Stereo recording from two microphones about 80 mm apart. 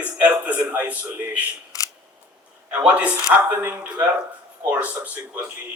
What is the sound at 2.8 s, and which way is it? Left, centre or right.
Speech, centre.